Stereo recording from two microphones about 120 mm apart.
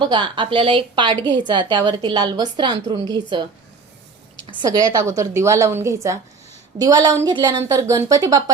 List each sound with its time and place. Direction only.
0.0 s a woman's voice: 40° right (ahead or behind)
4.7 s a woman's voice: 30° right (ahead or behind)